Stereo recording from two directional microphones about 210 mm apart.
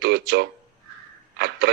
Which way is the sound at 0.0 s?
50° right (ahead or behind).